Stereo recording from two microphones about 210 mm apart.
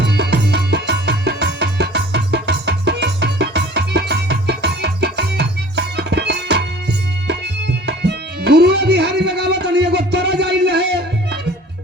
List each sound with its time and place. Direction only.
0.0 s music: 50° right (ahead or behind)